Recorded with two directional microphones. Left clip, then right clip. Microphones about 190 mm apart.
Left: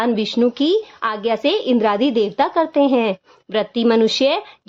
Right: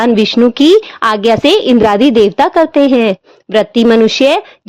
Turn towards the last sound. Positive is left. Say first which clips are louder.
# right 7 dB
turn(degrees=-35)  # may be behind; listen again after turning